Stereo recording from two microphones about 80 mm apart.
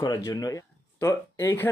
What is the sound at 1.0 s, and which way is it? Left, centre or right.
Speech, left.